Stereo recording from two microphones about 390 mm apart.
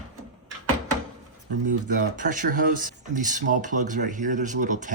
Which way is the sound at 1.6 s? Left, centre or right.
Right.